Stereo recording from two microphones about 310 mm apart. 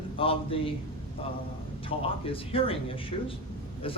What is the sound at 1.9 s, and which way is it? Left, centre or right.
A man's voice, centre.